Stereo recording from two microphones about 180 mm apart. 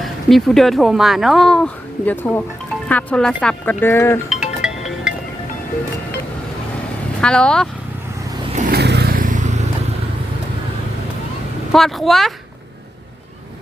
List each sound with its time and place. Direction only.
0.0 s speech: centre (ahead or behind)
4.3 s music: 5° right (ahead or behind)
7.2 s speech: 5° left (ahead or behind)
8.7 s vehicle: 65° right (ahead or behind); by 9.6 s 40° right (ahead or behind)
11.7 s speech: centre (ahead or behind)